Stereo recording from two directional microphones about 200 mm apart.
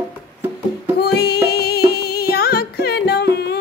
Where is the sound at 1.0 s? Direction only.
55° left (ahead or behind).